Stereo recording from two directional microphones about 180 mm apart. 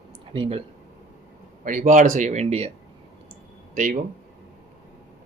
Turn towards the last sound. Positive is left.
turn(degrees=-50)  # may be behind; listen again after turning